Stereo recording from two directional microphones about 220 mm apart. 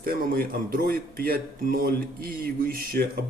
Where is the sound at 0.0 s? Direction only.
40° right (ahead or behind).